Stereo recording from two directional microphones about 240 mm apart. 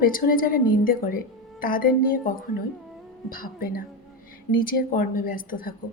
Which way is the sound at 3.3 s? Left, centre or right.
Left.